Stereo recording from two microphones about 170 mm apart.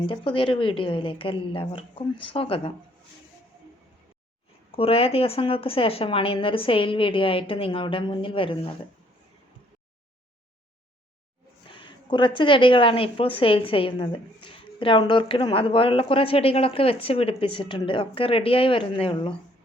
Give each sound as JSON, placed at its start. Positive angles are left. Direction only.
{"t": 0.0, "sound": "a woman's voice", "side_deg": 30}
{"t": 4.7, "sound": "a woman's voice", "side_deg": 35}
{"t": 11.7, "sound": "a woman's voice", "side_deg": 30}